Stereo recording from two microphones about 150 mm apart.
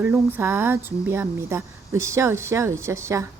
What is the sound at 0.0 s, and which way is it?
Speech, 15° right (ahead or behind).